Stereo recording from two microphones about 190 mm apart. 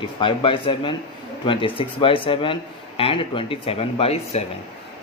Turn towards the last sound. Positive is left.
turn(degrees=35)  # may be behind; listen again after turning